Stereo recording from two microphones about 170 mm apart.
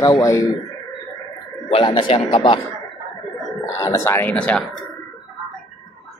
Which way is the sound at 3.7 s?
15° left (ahead or behind).